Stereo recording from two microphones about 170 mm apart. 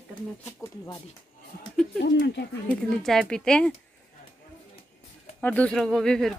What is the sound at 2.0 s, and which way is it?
Speech, 90° left.